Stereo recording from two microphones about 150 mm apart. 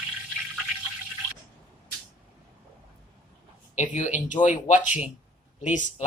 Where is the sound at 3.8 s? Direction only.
55° left (ahead or behind).